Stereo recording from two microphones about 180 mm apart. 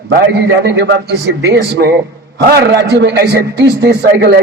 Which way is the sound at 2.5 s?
65° right (ahead or behind).